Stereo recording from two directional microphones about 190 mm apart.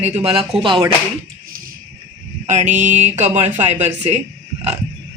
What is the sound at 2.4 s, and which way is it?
Mantra, 40° right (ahead or behind).